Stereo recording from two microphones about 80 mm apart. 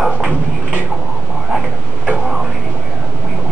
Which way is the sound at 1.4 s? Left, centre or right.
Centre.